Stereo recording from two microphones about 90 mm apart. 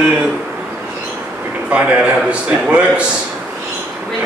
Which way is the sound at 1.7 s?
15° right (ahead or behind).